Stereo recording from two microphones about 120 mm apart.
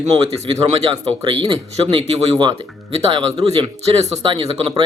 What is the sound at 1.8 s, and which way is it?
A man's voice, 45° right (ahead or behind).